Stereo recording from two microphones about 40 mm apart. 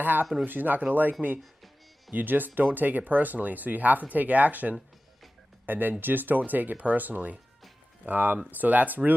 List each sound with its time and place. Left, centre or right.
0.0 s speech: right
2.1 s speech: right
5.7 s speech: right